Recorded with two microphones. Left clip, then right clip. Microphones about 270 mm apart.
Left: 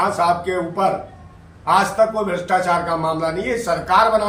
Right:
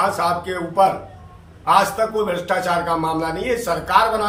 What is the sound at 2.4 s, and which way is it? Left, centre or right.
A man's voice, centre.